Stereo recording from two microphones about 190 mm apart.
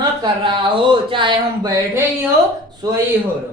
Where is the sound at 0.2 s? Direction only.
25° right (ahead or behind).